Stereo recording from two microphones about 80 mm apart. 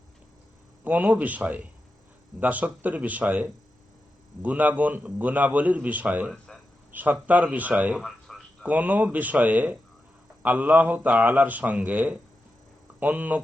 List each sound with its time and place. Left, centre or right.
0.9 s a man's voice: right
8.0 s a sound: centre
8.6 s a man's voice: right